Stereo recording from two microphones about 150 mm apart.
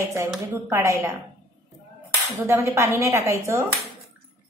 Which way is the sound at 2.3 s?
15° right (ahead or behind).